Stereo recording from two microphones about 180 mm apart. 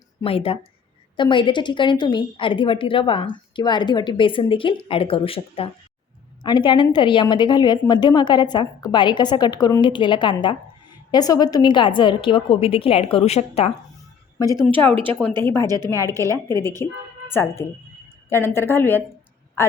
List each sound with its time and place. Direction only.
0.2 s a woman's voice: 30° left (ahead or behind)
15.6 s a woman's voice: 20° right (ahead or behind)
15.9 s a woman's voice: 15° left (ahead or behind)
16.1 s a woman's voice: 15° right (ahead or behind)
16.5 s a woman's voice: 15° left (ahead or behind)